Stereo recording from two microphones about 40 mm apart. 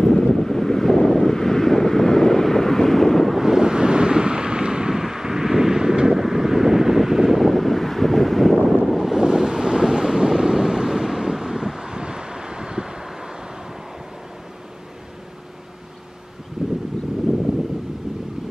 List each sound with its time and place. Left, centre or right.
0.0 s vehicle: centre
3.3 s wind noise: centre
9.2 s wind noise: centre
16.6 s a sound: centre